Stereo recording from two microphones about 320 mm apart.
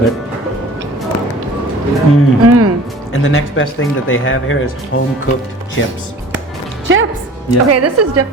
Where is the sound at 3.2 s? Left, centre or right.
Left.